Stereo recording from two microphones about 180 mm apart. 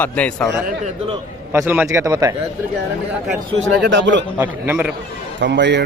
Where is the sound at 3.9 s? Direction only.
90° right.